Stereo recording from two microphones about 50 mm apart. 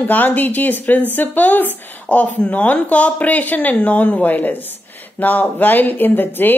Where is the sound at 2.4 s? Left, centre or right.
Left.